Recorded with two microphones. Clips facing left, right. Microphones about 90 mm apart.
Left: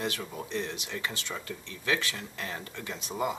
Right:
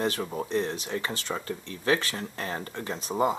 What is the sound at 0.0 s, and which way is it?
Speech, 40° right (ahead or behind).